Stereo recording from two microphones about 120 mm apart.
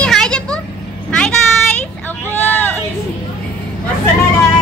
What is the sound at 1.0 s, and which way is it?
Child singing, 5° left (ahead or behind).